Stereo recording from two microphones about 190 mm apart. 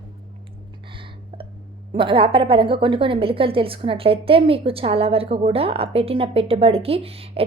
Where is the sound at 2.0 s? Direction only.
25° right (ahead or behind).